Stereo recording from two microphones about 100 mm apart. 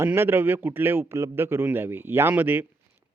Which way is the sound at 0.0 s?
25° right (ahead or behind).